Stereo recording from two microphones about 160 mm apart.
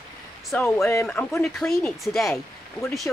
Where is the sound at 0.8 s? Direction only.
15° left (ahead or behind).